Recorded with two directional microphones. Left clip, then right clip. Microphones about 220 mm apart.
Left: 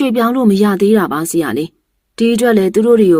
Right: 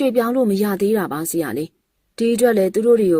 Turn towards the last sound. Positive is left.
turn(degrees=-15)  # may be behind; listen again after turning